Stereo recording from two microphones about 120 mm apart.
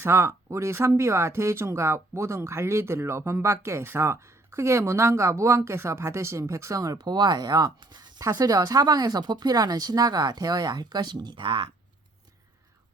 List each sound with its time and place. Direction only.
0.0 s speech: 20° right (ahead or behind); by 11.7 s 40° right (ahead or behind)